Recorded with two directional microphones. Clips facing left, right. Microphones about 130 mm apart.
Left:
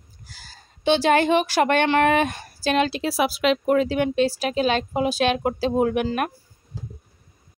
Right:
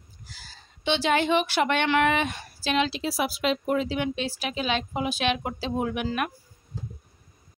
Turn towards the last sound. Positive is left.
turn(degrees=45)  # may be behind; listen again after turning